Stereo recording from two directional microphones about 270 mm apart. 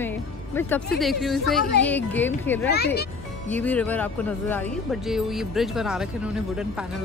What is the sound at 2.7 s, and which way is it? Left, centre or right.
Speech, left.